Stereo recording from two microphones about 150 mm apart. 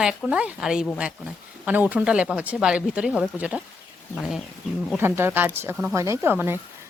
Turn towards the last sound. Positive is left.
turn(degrees=-15)  # may be behind; listen again after turning